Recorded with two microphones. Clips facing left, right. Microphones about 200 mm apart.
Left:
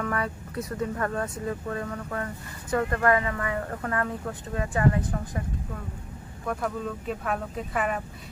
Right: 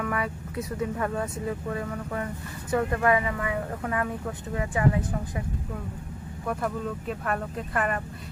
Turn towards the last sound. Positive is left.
turn(degrees=0)  # may be behind; listen again after turning